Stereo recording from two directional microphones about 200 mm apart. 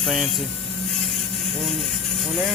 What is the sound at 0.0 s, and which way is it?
Speech, centre (ahead or behind).